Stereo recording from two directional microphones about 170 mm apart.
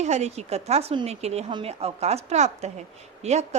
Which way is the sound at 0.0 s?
40° right (ahead or behind).